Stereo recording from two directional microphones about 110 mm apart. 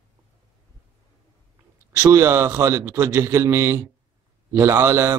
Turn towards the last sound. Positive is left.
turn(degrees=-25)  # may be behind; listen again after turning